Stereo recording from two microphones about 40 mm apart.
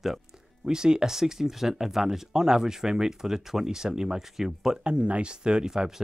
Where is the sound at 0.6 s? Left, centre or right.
Centre.